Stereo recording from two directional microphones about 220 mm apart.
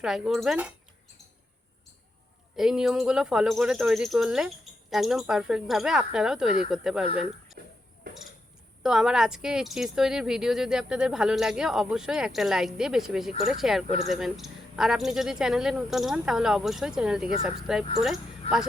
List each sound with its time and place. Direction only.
0.0 s speech: centre (ahead or behind)
2.6 s speech: centre (ahead or behind)
7.6 s a sound: 45° right (ahead or behind)
8.8 s speech: 5° right (ahead or behind)
13.8 s speech: 30° left (ahead or behind)
14.1 s speech: centre (ahead or behind)